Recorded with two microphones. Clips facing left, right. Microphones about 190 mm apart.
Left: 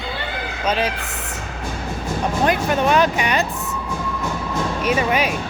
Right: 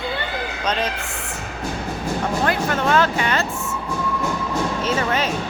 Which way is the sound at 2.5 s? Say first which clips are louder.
Left 3 dB; 20° left (ahead or behind).